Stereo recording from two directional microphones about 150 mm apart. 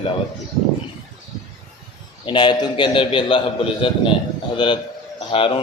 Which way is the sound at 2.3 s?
30° left (ahead or behind).